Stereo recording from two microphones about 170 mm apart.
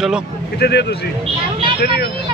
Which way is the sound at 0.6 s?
75° left (ahead or behind).